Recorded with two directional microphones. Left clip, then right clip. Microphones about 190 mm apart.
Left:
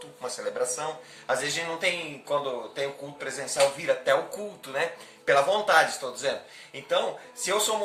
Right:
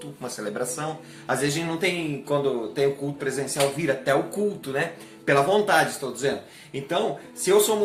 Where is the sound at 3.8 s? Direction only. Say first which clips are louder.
Right 1 dB; 10° right (ahead or behind).